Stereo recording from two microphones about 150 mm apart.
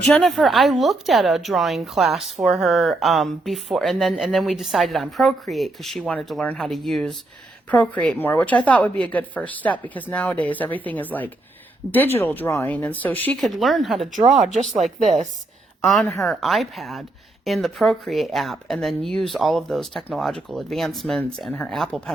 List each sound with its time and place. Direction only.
0.1 s a woman's voice: centre (ahead or behind)
14.1 s a woman's voice: 60° right (ahead or behind)
16.2 s a woman's voice: centre (ahead or behind)